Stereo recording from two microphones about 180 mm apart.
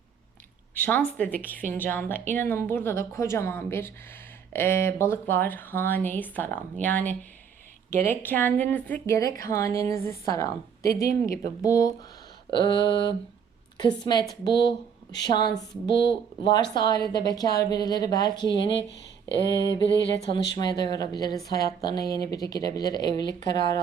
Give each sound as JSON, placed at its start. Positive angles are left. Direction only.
{"t": 0.7, "sound": "speech", "side_deg": 10}
{"t": 1.5, "sound": "a woman's voice", "side_deg": -50}
{"t": 1.8, "sound": "speech", "side_deg": 10}
{"t": 19.7, "sound": "music", "side_deg": 75}
{"t": 20.6, "sound": "speech", "side_deg": 25}